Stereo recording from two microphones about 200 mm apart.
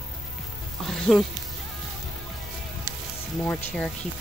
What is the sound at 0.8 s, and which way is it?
Speech, centre (ahead or behind).